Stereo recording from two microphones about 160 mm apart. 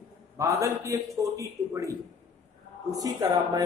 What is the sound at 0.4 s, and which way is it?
A man's voice, 20° right (ahead or behind).